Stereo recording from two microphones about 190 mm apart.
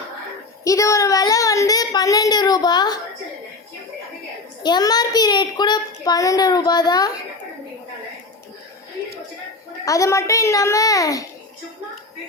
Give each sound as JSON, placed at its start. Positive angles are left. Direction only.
{"t": 0.6, "sound": "a child's voice", "side_deg": 15}
{"t": 4.6, "sound": "a child's voice", "side_deg": 20}
{"t": 9.8, "sound": "a child's voice", "side_deg": 15}